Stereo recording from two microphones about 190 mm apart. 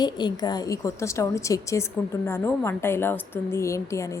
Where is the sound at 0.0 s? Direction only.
20° left (ahead or behind).